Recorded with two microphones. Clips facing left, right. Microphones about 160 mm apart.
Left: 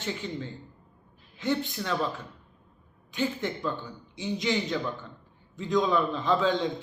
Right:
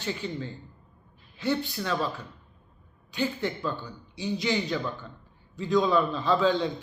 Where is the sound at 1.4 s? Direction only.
20° left (ahead or behind).